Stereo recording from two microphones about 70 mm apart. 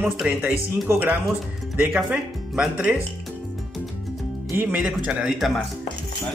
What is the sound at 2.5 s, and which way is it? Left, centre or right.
Speech, centre.